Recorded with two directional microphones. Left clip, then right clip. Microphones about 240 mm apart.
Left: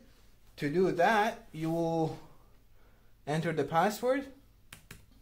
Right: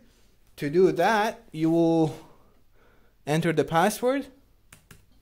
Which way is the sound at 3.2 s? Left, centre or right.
Right.